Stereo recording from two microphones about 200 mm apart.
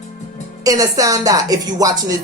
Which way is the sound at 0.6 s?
15° right (ahead or behind).